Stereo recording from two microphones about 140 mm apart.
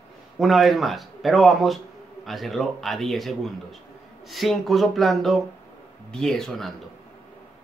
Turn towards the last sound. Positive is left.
turn(degrees=0)  # may be behind; listen again after turning